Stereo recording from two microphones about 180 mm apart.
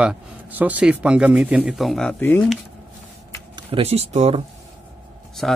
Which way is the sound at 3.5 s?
35° right (ahead or behind).